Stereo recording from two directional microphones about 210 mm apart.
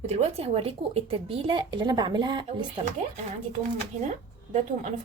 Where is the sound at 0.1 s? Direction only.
30° right (ahead or behind).